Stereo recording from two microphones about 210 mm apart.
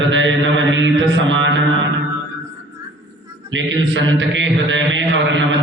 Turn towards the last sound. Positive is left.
turn(degrees=-65)  # may be behind; listen again after turning